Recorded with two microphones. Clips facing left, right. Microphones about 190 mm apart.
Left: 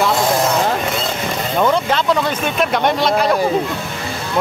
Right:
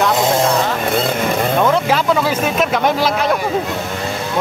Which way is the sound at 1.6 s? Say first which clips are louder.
Left 2 dB; 5° right (ahead or behind).